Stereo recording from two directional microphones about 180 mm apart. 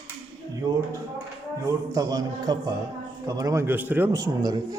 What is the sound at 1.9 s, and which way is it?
A man's voice, 20° right (ahead or behind).